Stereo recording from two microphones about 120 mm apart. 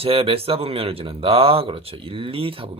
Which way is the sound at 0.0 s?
50° right (ahead or behind).